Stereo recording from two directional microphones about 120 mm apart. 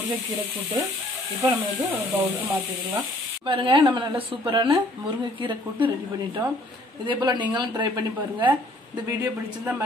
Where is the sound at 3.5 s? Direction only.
45° right (ahead or behind).